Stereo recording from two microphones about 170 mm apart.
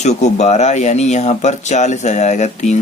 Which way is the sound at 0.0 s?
40° left (ahead or behind).